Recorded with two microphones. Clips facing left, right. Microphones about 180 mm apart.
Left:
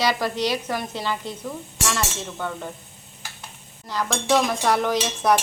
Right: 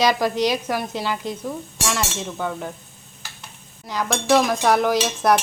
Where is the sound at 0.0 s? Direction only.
15° right (ahead or behind).